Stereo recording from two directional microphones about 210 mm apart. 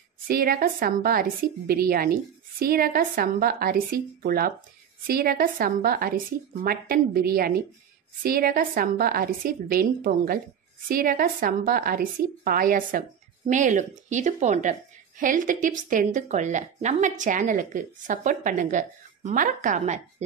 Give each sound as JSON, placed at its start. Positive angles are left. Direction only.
{"t": 0.3, "sound": "a woman's voice", "side_deg": -45}